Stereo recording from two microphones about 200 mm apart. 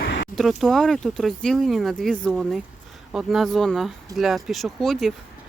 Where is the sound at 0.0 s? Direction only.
65° left (ahead or behind).